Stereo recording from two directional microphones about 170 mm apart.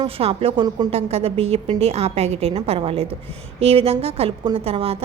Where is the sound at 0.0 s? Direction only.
35° right (ahead or behind).